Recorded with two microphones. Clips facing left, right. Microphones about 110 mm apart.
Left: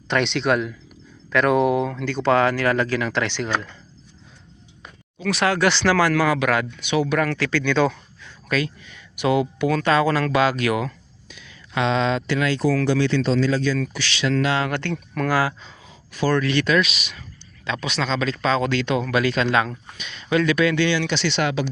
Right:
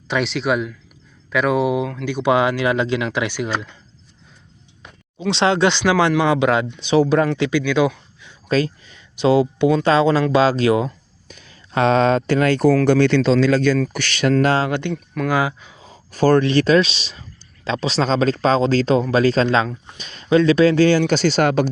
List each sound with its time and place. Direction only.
0.1 s speech: 5° right (ahead or behind)
2.0 s speech: 15° right (ahead or behind)
5.2 s speech: 25° right (ahead or behind)
7.3 s speech: 20° right (ahead or behind)
8.4 s speech: 35° right (ahead or behind)
11.3 s speech: 40° right (ahead or behind); by 13.7 s 70° right (ahead or behind)
13.9 s speech: 55° right (ahead or behind)
14.7 s speech: 15° right (ahead or behind)
14.9 s speech: centre (ahead or behind)
15.3 s speech: 20° right (ahead or behind)
15.8 s a sound: 40° right (ahead or behind)
16.4 s speech: 30° right (ahead or behind)